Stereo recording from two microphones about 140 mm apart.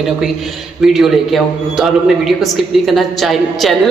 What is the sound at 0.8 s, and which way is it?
Speech, centre (ahead or behind).